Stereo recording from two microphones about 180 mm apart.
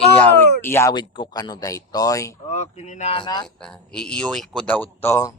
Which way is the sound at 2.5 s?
40° left (ahead or behind).